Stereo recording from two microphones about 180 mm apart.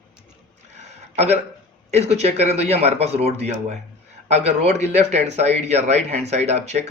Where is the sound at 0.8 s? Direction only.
40° right (ahead or behind).